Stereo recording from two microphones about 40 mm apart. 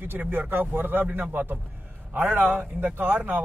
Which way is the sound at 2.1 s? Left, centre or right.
Right.